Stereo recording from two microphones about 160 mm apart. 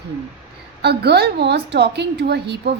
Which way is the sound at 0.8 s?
90° right.